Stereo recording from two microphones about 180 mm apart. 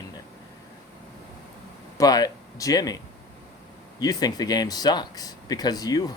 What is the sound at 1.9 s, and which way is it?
Speech, 20° left (ahead or behind).